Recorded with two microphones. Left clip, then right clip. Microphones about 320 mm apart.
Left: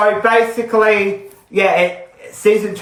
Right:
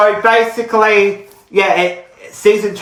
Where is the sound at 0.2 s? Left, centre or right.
Centre.